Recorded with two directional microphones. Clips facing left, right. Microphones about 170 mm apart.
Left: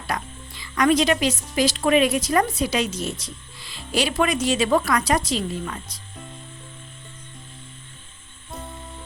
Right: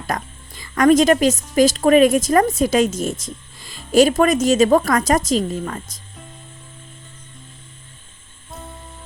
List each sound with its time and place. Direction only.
0.1 s speech: 45° right (ahead or behind)